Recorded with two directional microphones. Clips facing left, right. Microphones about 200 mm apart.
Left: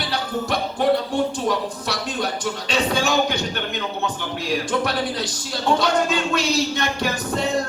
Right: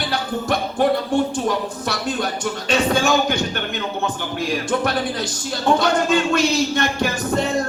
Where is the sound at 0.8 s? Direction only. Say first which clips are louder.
Right 1 dB; 50° right (ahead or behind).